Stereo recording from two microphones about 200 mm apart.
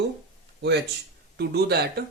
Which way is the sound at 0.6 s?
60° right (ahead or behind).